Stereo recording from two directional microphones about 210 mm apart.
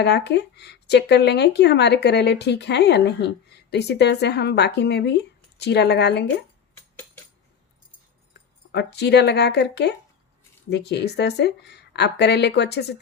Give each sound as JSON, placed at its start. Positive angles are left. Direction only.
{"t": 0.0, "sound": "speech", "side_deg": 55}
{"t": 8.3, "sound": "speech", "side_deg": 55}